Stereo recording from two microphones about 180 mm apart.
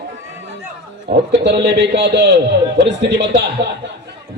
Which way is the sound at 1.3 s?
70° right (ahead or behind).